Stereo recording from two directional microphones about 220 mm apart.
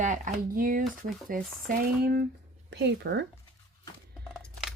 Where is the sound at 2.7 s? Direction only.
50° right (ahead or behind).